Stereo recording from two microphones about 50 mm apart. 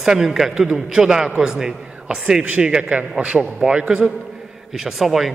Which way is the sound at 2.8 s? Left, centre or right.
Right.